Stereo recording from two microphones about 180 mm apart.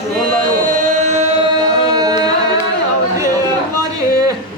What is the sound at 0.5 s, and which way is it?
Chant, 45° right (ahead or behind).